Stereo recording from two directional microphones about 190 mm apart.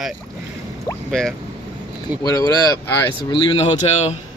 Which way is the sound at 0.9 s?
20° left (ahead or behind).